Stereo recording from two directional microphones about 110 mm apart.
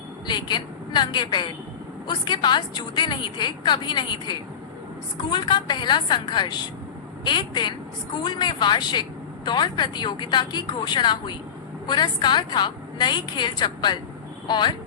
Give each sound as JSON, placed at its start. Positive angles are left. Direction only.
{"t": 0.3, "sound": "a woman's voice", "side_deg": 40}